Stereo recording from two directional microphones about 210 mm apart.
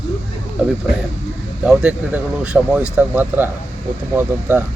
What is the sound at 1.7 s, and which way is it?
Speech, 5° right (ahead or behind).